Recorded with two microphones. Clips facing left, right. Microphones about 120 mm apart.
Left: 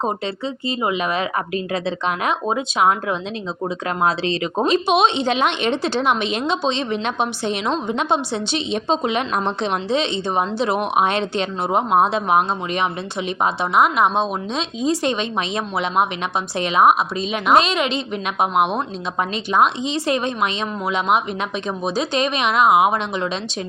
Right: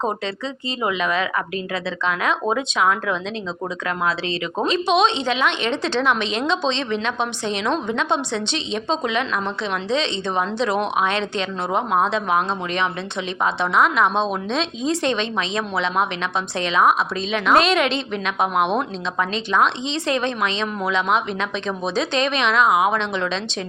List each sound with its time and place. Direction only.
0.8 s a woman's voice: 25° left (ahead or behind)
2.0 s speech: 20° left (ahead or behind)
4.6 s speech: 15° left (ahead or behind)
7.6 s a woman's voice: 30° left (ahead or behind)
9.9 s speech: 15° left (ahead or behind)
12.1 s speech: 10° left (ahead or behind)
17.6 s a woman's voice: centre (ahead or behind)
21.8 s speech: 5° left (ahead or behind)